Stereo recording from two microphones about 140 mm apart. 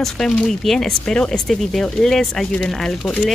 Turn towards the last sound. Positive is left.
turn(degrees=5)  # may be behind; listen again after turning